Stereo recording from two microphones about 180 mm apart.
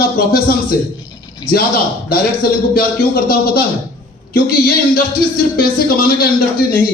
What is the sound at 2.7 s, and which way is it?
A man's voice, 55° left (ahead or behind).